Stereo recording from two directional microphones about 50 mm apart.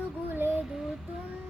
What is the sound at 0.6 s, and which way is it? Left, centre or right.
Child singing, centre.